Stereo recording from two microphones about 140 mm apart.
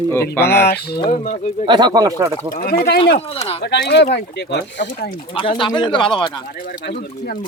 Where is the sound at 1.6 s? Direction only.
30° right (ahead or behind).